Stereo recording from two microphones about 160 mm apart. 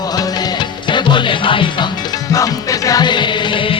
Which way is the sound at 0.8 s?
30° left (ahead or behind).